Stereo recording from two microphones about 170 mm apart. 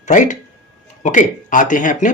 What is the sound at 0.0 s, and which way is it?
Speech, 45° left (ahead or behind).